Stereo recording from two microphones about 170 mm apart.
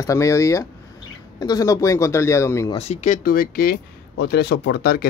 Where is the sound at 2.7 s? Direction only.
45° left (ahead or behind); by 3.7 s 60° left (ahead or behind).